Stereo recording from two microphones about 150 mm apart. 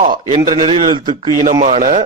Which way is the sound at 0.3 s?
35° right (ahead or behind).